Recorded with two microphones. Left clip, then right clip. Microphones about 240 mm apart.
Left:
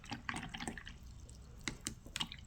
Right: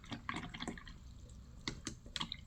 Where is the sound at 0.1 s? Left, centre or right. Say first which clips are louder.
Left 1 dB; left.